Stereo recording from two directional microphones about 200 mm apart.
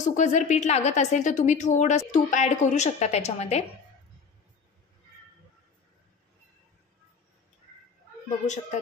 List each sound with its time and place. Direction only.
0.0 s a woman's voice: 35° left (ahead or behind)